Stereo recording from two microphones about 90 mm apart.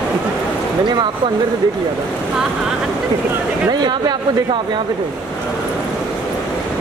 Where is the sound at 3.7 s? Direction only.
50° right (ahead or behind).